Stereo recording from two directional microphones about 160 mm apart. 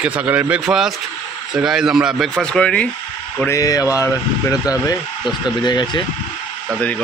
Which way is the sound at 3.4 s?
20° left (ahead or behind).